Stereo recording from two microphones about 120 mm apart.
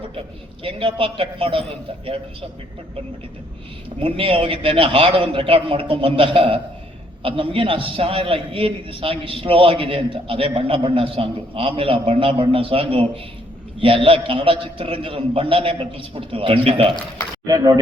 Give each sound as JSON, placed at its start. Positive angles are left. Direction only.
{"t": 0.6, "sound": "a man's voice", "side_deg": -50}
{"t": 4.0, "sound": "a man's voice", "side_deg": -50}
{"t": 17.4, "sound": "speech", "side_deg": -30}